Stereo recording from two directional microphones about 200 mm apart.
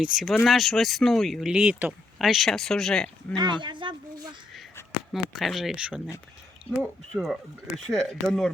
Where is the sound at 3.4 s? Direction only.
25° right (ahead or behind).